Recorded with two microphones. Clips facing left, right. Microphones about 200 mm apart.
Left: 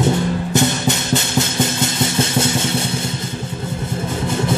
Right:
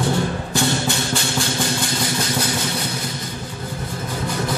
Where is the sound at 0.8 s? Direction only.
20° left (ahead or behind).